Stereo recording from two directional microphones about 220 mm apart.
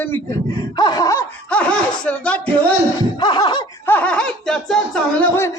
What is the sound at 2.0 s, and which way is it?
Speech, 5° left (ahead or behind).